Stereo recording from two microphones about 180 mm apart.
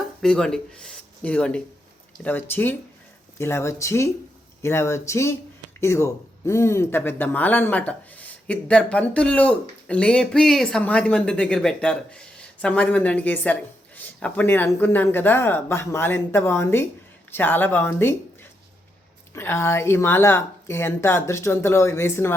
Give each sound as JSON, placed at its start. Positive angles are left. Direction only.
{"t": 0.2, "sound": "speech", "side_deg": 5}
{"t": 19.3, "sound": "speech", "side_deg": 15}